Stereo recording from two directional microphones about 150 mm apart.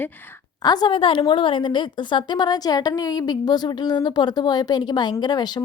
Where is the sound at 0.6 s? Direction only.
25° left (ahead or behind).